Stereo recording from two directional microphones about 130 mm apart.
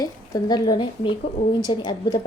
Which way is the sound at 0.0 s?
30° left (ahead or behind).